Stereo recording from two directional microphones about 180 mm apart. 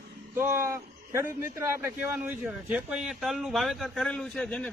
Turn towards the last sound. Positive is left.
turn(degrees=5)  # may be behind; listen again after turning